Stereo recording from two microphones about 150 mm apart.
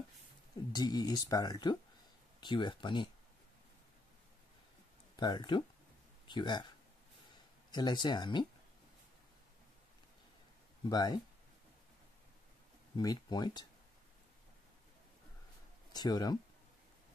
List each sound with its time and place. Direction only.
0.7 s speech: 25° left (ahead or behind)
5.1 s speech: 30° left (ahead or behind)
7.7 s speech: 30° left (ahead or behind)
10.9 s speech: 25° left (ahead or behind)
12.9 s speech: 25° left (ahead or behind)
15.9 s speech: 25° left (ahead or behind)